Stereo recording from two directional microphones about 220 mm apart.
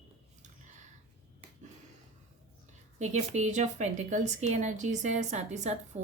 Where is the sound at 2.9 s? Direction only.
30° right (ahead or behind).